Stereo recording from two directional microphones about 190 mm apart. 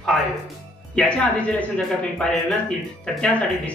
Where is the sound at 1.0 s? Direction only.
5° left (ahead or behind).